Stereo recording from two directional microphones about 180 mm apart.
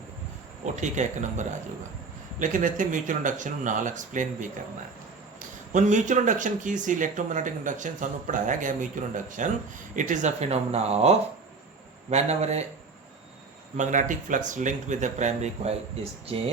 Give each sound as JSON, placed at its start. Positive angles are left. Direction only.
{"t": 0.6, "sound": "speech", "side_deg": -40}
{"t": 13.7, "sound": "speech", "side_deg": -45}